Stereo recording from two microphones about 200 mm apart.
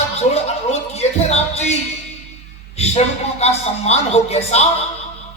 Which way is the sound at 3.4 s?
30° left (ahead or behind).